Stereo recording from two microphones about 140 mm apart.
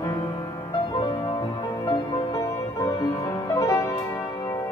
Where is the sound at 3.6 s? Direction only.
25° left (ahead or behind).